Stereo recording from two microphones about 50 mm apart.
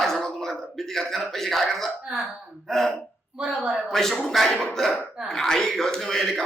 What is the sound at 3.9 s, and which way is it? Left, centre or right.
Speech, centre.